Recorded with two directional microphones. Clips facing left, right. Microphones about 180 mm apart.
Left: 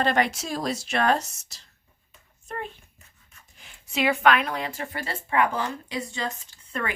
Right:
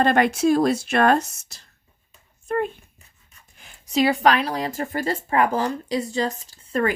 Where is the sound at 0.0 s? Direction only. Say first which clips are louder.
Right 6 dB; 50° right (ahead or behind).